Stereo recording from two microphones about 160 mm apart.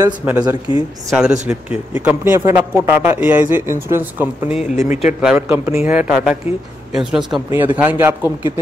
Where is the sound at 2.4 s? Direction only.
20° right (ahead or behind).